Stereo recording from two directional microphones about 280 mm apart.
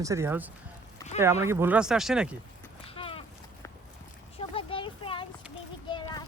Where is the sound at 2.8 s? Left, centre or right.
Centre.